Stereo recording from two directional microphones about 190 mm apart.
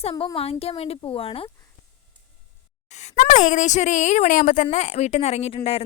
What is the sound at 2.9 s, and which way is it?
A woman's voice, 40° left (ahead or behind).